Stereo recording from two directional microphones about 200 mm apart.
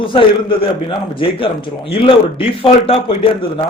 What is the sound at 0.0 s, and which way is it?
A man's voice, 25° left (ahead or behind).